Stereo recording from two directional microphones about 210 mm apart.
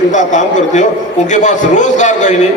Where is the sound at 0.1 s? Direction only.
35° left (ahead or behind).